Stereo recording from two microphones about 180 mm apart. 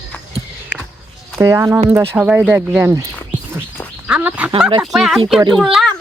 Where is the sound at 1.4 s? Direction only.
15° right (ahead or behind).